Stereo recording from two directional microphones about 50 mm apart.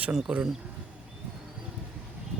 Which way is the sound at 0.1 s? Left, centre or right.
Centre.